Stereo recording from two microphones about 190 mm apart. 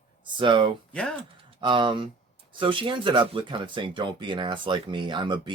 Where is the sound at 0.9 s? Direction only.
5° left (ahead or behind).